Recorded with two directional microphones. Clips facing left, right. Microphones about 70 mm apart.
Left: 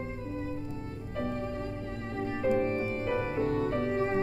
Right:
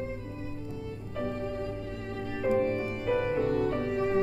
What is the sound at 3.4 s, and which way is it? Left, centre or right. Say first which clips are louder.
Music: right 1 dB; left.